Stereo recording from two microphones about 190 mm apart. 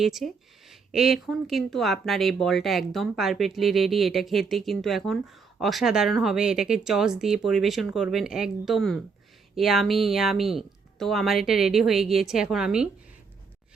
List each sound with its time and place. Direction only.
0.0 s speech: centre (ahead or behind)